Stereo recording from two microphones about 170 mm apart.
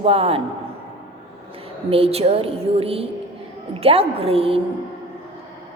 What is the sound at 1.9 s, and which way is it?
A woman's voice, 35° right (ahead or behind).